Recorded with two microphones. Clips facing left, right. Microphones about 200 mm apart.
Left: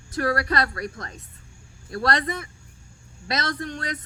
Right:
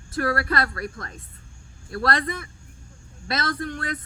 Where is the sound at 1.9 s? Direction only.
25° left (ahead or behind).